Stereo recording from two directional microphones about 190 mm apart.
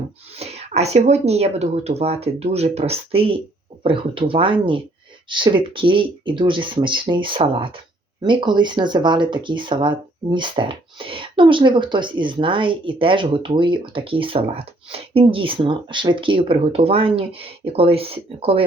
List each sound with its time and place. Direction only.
0.3 s speech: 35° right (ahead or behind)